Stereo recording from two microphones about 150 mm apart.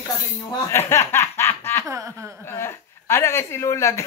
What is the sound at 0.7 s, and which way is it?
Snicker, 15° left (ahead or behind).